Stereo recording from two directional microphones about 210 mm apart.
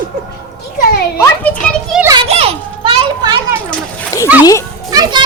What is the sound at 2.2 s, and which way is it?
Children playing, 30° right (ahead or behind).